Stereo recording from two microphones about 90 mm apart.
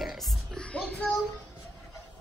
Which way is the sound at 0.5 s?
15° left (ahead or behind).